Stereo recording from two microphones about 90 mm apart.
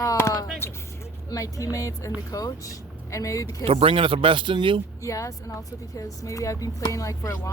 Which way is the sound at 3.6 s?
90° right.